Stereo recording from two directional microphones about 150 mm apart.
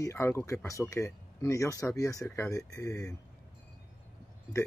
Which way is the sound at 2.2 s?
10° left (ahead or behind).